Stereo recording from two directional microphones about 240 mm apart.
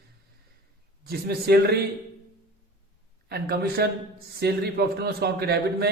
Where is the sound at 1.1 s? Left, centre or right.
Right.